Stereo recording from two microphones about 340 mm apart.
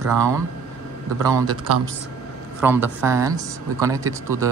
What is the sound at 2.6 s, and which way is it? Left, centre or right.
Speech, centre.